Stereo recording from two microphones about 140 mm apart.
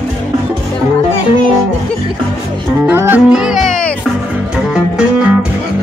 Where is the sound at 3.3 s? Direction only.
Centre (ahead or behind).